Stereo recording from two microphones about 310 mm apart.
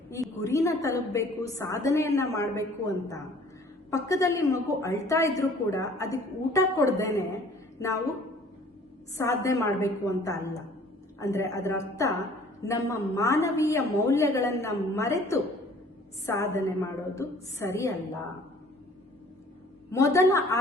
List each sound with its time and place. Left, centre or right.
0.1 s a woman's voice: centre
9.1 s a woman's voice: centre
19.9 s a woman's voice: centre